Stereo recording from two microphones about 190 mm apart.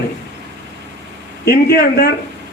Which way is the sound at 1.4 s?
55° left (ahead or behind).